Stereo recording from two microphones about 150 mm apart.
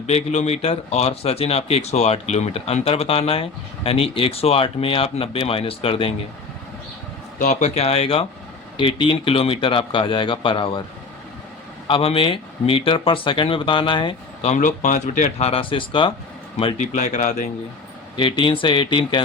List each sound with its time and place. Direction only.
0.1 s speech: 45° left (ahead or behind)
7.3 s speech: 55° left (ahead or behind); by 10.8 s 35° left (ahead or behind)
11.9 s speech: 35° left (ahead or behind)
14.4 s speech: 55° left (ahead or behind); by 16.1 s 35° left (ahead or behind)
16.7 s speech: 55° left (ahead or behind)
18.2 s speech: 35° left (ahead or behind)